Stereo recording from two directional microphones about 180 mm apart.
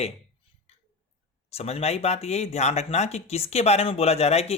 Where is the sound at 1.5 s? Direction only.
35° left (ahead or behind).